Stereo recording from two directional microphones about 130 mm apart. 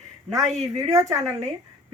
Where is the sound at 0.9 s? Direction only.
25° right (ahead or behind).